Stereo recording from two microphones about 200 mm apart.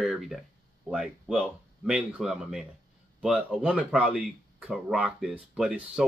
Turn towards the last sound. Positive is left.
turn(degrees=-5)  # may be behind; listen again after turning